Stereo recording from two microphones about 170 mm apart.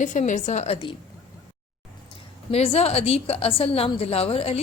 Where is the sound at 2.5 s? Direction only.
35° left (ahead or behind).